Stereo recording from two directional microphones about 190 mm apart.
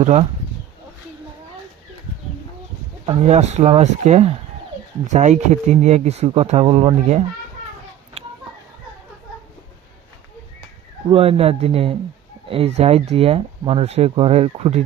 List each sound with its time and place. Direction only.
0.0 s speech: 35° right (ahead or behind)
3.1 s speech: 35° right (ahead or behind)
11.1 s speech: 30° right (ahead or behind)